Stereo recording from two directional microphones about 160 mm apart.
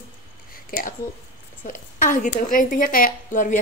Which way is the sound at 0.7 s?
60° left (ahead or behind).